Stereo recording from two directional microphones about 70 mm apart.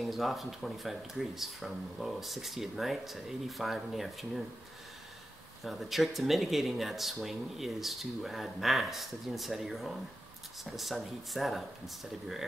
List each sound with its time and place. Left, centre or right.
0.0 s speech: centre
5.6 s speech: centre